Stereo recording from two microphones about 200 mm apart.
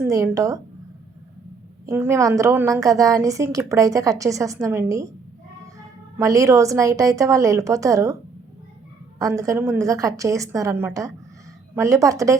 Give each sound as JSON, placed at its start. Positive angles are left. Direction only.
{"t": 0.0, "sound": "a woman's voice", "side_deg": -15}
{"t": 1.9, "sound": "a woman's voice", "side_deg": -15}
{"t": 6.1, "sound": "a woman's voice", "side_deg": -15}
{"t": 9.1, "sound": "a woman's voice", "side_deg": -15}